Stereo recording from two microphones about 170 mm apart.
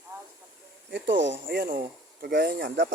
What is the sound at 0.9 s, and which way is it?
Speech, 90° right.